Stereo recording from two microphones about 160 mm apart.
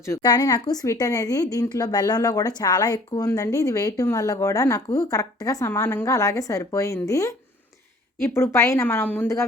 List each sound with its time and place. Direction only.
0.0 s a woman's voice: 20° left (ahead or behind)